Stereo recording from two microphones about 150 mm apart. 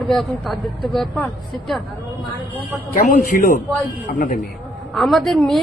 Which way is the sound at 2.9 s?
70° left (ahead or behind).